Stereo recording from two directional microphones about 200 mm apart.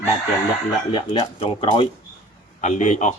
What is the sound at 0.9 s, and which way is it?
Speech, 25° left (ahead or behind).